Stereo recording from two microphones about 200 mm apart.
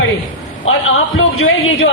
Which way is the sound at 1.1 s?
90° left.